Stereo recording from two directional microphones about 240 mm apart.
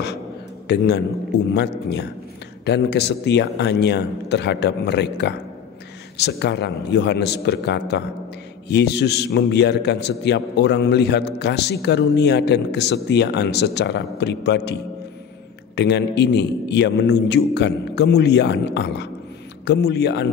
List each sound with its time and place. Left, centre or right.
0.7 s a man's voice: left